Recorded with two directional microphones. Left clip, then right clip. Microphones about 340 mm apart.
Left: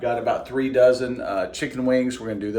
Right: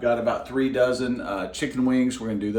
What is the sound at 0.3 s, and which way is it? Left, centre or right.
Speech, centre.